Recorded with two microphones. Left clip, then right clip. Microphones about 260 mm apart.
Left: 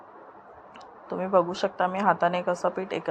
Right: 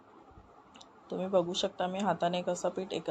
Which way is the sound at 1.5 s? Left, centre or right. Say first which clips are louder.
Left 7 dB; centre.